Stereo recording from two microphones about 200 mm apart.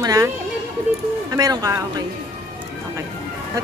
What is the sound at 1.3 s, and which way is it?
Speech, 20° right (ahead or behind).